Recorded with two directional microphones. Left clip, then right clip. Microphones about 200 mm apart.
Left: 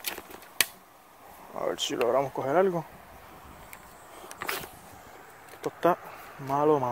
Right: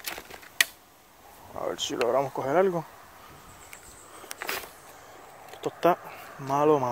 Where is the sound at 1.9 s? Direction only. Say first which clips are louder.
Right 1 dB; centre (ahead or behind).